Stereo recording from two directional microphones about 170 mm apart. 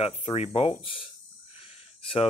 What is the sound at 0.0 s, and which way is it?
Speech, 35° left (ahead or behind).